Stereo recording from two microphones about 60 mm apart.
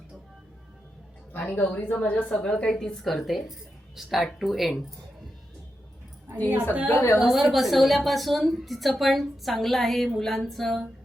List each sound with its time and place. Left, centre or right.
1.3 s a woman's voice: left; by 4.7 s centre
6.3 s a woman's voice: right
6.9 s speech: left
7.2 s a woman's voice: centre